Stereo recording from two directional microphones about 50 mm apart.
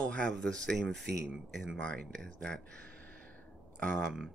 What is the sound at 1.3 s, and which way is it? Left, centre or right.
Speech, centre.